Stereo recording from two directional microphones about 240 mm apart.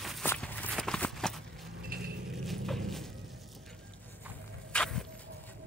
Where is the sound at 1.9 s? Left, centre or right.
Right.